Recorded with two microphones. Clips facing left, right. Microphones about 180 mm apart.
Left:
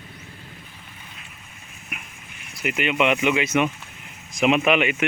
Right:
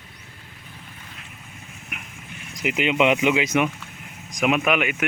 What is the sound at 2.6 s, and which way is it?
Speech, 15° right (ahead or behind).